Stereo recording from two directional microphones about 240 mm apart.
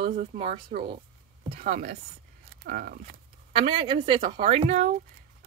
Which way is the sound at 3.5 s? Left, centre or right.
Centre.